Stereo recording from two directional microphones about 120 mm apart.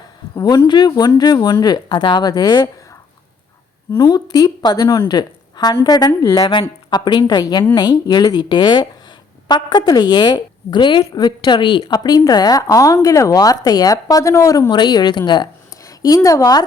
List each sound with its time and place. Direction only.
0.3 s a woman's voice: 35° left (ahead or behind)
3.9 s a woman's voice: 35° left (ahead or behind)